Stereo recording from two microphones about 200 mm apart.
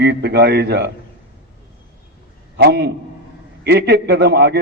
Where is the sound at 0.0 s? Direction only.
55° right (ahead or behind).